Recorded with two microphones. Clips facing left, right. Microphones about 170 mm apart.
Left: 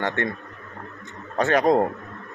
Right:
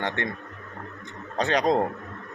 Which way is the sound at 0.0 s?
15° right (ahead or behind).